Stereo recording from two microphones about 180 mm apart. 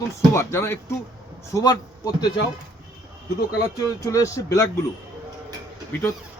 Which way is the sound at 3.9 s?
15° left (ahead or behind).